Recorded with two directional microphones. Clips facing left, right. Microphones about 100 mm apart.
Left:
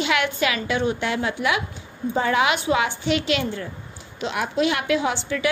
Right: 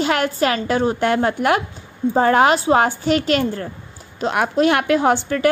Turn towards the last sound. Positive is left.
turn(degrees=-50)  # may be behind; listen again after turning